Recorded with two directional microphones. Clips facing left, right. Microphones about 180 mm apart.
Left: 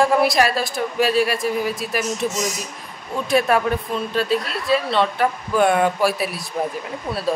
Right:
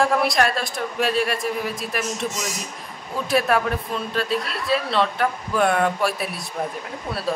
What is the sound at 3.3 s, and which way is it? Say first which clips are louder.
Speech: left 2 dB; centre (ahead or behind).